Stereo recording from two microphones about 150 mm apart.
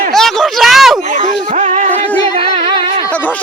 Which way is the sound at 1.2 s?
55° right (ahead or behind).